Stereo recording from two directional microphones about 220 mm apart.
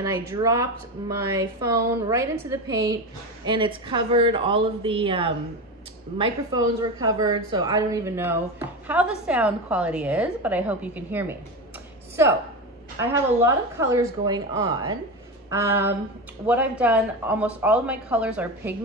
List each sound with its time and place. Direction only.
0.0 s a woman's voice: 15° right (ahead or behind)